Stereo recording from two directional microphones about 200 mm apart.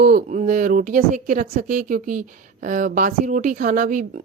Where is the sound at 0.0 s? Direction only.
40° right (ahead or behind).